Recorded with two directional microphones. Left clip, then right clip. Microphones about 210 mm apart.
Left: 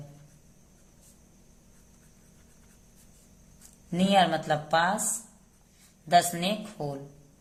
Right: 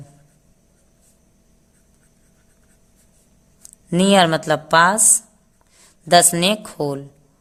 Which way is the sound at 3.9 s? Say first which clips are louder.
Right 9 dB; 55° right (ahead or behind).